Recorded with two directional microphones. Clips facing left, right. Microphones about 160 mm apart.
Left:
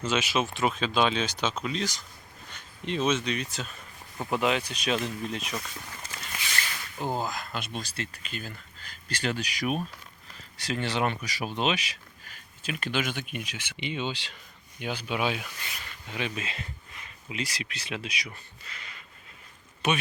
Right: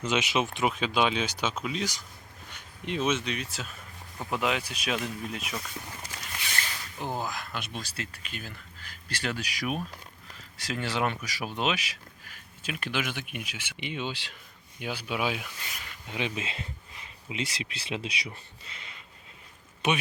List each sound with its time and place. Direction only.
0.0 s speech: 20° right (ahead or behind); by 15.9 s centre (ahead or behind)
16.0 s speech: 20° right (ahead or behind)